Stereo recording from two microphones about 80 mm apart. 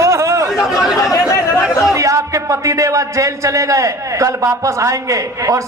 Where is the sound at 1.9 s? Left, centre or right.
Right.